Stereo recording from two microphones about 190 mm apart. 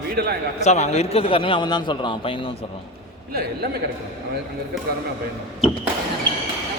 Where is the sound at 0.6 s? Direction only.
35° left (ahead or behind).